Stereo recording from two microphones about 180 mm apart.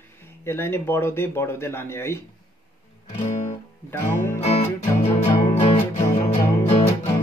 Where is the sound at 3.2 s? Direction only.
40° left (ahead or behind).